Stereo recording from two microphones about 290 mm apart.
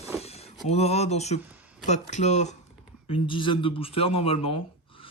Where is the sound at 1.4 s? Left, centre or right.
Centre.